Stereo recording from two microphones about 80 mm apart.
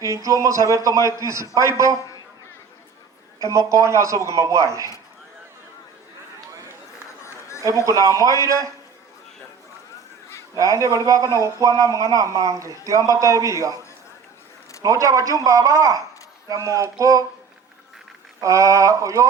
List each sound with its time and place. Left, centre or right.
0.0 s a man's voice: right
3.4 s a man's voice: right
7.6 s a man's voice: right
10.5 s speech: right
14.8 s speech: right
18.3 s a man's voice: right